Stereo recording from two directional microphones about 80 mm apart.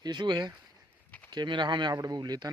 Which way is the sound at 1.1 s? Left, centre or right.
Centre.